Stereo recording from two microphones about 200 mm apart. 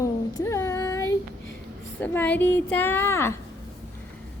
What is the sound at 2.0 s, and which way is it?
A woman's voice, 10° left (ahead or behind).